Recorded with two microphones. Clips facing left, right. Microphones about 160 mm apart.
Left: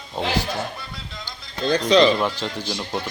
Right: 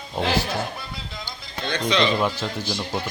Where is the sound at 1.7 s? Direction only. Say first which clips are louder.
Left 6 dB; 40° left (ahead or behind).